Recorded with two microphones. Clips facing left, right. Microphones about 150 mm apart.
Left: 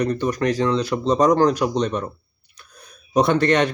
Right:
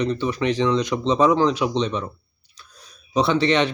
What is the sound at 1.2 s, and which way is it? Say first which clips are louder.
Speech: left 2 dB; 45° left (ahead or behind).